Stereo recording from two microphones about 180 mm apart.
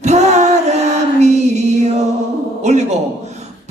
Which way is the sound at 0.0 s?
40° right (ahead or behind).